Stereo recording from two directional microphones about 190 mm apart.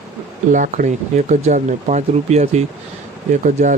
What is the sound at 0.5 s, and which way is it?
Speech, 45° right (ahead or behind).